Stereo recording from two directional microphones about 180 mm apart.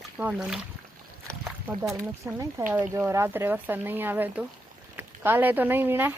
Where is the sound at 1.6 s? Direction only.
10° right (ahead or behind).